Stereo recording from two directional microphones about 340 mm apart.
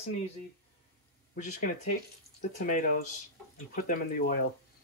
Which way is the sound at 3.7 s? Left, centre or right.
Left.